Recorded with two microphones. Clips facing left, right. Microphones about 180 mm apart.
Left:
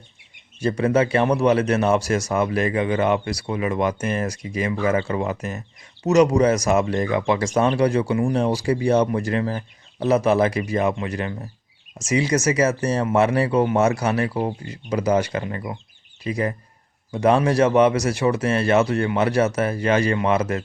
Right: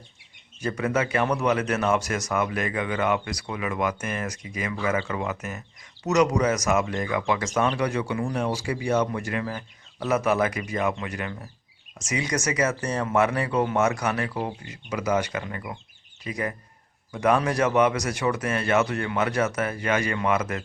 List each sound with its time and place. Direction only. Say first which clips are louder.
0.6 s speech: left 6 dB; 30° left (ahead or behind)